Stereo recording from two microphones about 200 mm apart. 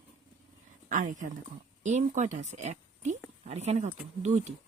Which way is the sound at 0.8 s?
40° right (ahead or behind).